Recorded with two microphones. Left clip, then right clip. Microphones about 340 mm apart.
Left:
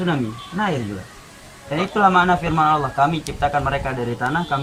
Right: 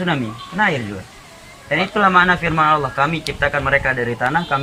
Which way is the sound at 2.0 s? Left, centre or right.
Centre.